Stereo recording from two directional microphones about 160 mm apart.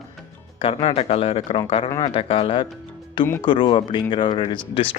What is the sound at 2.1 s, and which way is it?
Speech, 35° left (ahead or behind).